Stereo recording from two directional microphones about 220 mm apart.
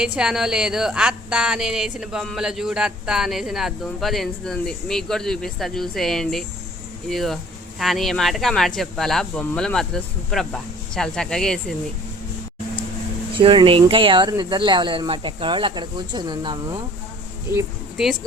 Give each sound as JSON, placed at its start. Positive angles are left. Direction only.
{"t": 0.0, "sound": "speech", "side_deg": -5}
{"t": 13.4, "sound": "speech", "side_deg": -25}
{"t": 17.5, "sound": "speech", "side_deg": -5}